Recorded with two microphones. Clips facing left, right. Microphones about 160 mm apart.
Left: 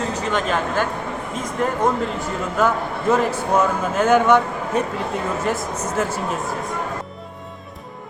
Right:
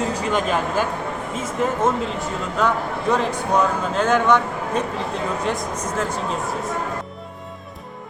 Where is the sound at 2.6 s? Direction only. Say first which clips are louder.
Left 1 dB; 5° left (ahead or behind).